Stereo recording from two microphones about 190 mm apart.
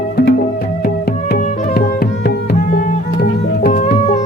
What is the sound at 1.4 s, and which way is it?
Music, 50° left (ahead or behind).